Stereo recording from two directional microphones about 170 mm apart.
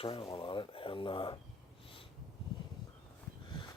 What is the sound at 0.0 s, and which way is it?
Speech, 30° left (ahead or behind).